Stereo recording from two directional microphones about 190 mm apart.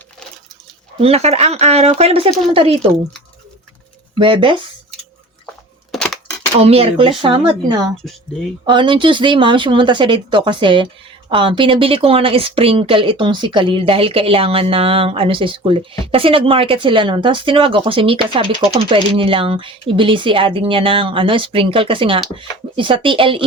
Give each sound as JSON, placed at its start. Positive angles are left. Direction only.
{"t": 0.9, "sound": "speech", "side_deg": -30}
{"t": 4.2, "sound": "speech", "side_deg": -25}
{"t": 6.6, "sound": "speech", "side_deg": -30}